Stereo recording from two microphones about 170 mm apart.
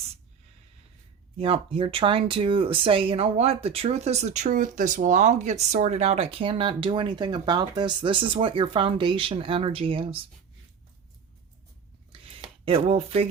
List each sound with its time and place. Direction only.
1.4 s speech: 35° right (ahead or behind)
12.6 s speech: 35° right (ahead or behind)